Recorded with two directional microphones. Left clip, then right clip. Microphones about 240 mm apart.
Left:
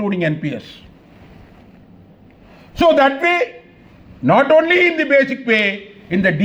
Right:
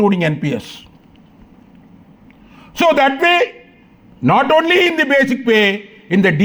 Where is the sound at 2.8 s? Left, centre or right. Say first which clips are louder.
Even; right.